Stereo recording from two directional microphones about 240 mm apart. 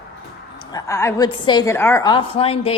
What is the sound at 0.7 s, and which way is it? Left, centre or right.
A woman's voice, centre.